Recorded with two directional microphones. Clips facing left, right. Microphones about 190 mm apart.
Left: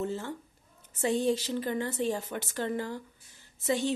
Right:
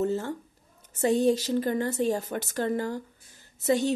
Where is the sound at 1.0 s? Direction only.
40° right (ahead or behind).